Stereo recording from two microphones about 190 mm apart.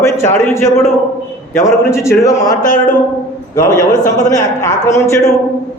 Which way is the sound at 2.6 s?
40° left (ahead or behind).